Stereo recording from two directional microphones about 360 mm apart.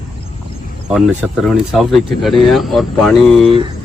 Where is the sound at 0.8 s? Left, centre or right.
Centre.